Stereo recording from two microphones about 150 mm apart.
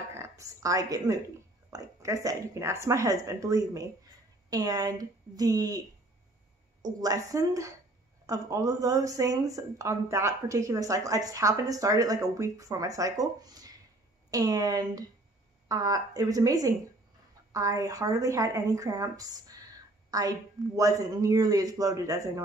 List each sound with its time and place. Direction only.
0.1 s a woman's voice: 20° right (ahead or behind)
6.8 s a woman's voice: 25° right (ahead or behind)